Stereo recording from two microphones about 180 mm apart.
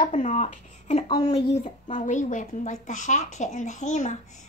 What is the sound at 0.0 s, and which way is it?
Speech, 45° left (ahead or behind).